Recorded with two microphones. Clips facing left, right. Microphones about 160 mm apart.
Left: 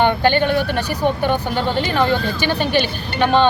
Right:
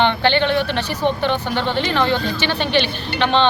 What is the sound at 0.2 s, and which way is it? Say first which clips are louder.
Speech: left 1 dB; 45° left (ahead or behind).